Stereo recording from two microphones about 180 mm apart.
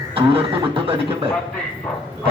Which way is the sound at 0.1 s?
30° right (ahead or behind).